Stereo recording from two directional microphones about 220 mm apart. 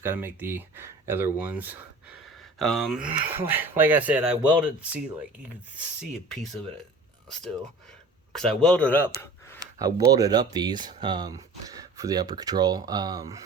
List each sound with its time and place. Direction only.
0.0 s speech: 10° right (ahead or behind)
2.2 s a sound: centre (ahead or behind)
3.3 s speech: 10° right (ahead or behind)
8.4 s speech: 5° left (ahead or behind)
9.7 s speech: 15° right (ahead or behind)